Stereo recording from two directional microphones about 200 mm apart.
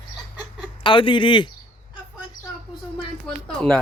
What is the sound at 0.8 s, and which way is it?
Speech, 25° left (ahead or behind).